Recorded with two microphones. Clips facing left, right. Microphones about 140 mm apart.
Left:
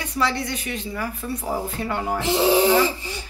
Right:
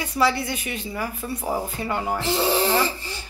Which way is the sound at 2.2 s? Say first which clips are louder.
Left 6 dB; 15° left (ahead or behind).